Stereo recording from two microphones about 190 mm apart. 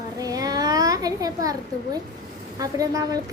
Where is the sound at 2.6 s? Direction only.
20° right (ahead or behind).